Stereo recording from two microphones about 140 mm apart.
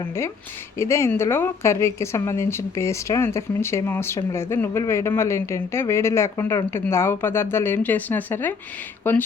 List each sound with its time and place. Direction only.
0.8 s speech: 20° left (ahead or behind)